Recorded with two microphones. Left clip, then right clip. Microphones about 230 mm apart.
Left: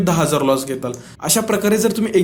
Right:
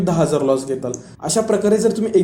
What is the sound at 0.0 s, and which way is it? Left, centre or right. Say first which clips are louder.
A man's voice: even; left.